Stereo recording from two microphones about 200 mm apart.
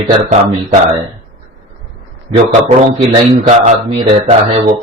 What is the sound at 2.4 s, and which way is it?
Speech, 35° right (ahead or behind).